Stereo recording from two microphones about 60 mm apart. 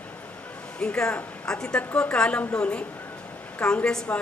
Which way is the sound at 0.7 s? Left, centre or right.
Centre.